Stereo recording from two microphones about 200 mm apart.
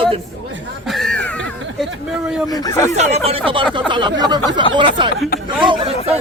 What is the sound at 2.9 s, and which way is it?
Speech, 30° right (ahead or behind).